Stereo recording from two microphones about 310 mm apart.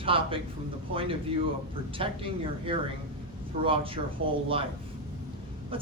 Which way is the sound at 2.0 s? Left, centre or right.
Centre.